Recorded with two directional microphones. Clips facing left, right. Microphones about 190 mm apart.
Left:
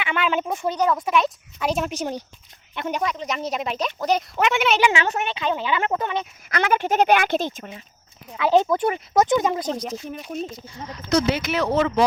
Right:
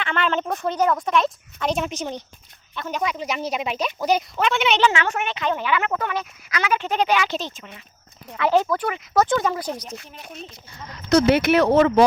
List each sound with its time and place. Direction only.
0.0 s speech: 10° left (ahead or behind)
2.7 s speech: 20° left (ahead or behind)
3.0 s speech: centre (ahead or behind)
4.4 s speech: 10° left (ahead or behind)
6.5 s speech: 55° left (ahead or behind)
8.3 s speech: 10° left (ahead or behind)
8.5 s speech: 20° left (ahead or behind)
11.1 s speech: 60° right (ahead or behind)